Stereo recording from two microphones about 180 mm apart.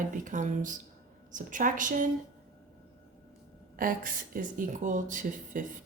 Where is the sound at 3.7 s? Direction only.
50° right (ahead or behind).